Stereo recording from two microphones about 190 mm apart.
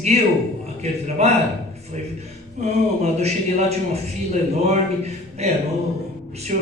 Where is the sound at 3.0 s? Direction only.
35° right (ahead or behind).